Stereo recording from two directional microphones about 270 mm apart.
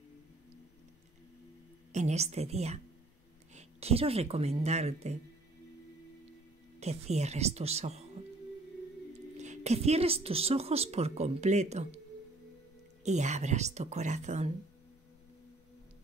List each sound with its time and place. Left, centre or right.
1.9 s a woman's voice: right
6.8 s a woman's voice: right
9.4 s a woman's voice: right
13.0 s a woman's voice: right